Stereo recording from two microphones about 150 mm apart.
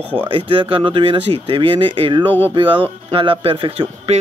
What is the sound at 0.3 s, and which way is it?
Speech, 35° right (ahead or behind).